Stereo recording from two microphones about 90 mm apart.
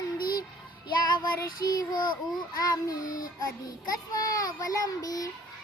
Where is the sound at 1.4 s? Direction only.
45° left (ahead or behind).